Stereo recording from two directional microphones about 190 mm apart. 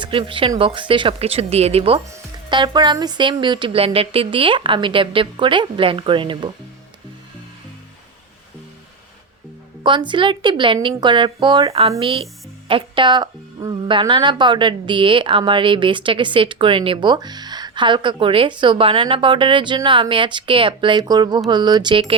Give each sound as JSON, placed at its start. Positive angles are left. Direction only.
{"t": 0.0, "sound": "speech", "side_deg": -25}
{"t": 2.0, "sound": "speech", "side_deg": -20}
{"t": 9.8, "sound": "speech", "side_deg": -25}